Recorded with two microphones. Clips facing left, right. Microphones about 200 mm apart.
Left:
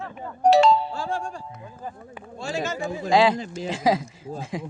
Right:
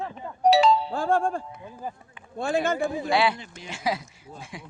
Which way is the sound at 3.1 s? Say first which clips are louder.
Left 6 dB; 90° left.